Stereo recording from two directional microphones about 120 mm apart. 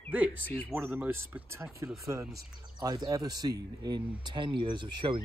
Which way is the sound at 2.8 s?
30° right (ahead or behind).